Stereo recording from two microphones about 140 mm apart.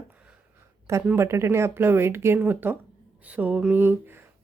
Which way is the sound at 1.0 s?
20° right (ahead or behind).